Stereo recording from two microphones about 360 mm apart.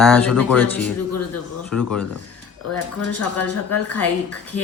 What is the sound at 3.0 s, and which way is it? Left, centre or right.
Speech, left.